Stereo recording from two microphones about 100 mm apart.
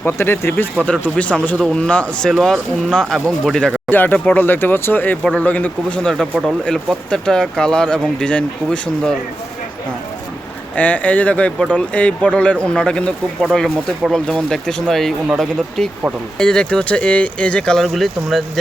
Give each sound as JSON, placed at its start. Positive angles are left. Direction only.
{"t": 0.0, "sound": "speech", "side_deg": 25}
{"t": 3.8, "sound": "speech", "side_deg": 20}
{"t": 10.8, "sound": "speech", "side_deg": 15}
{"t": 16.4, "sound": "speech", "side_deg": 10}